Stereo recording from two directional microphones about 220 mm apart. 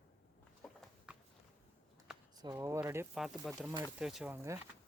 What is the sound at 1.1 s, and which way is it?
Walk, 5° right (ahead or behind).